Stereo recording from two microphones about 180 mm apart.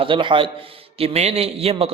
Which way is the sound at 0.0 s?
30° right (ahead or behind).